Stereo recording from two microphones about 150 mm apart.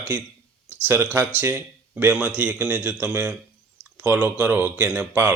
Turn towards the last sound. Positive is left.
turn(degrees=-10)  # may be behind; listen again after turning